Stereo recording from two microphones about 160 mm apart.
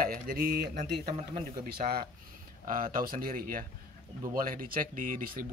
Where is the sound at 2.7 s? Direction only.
60° right (ahead or behind).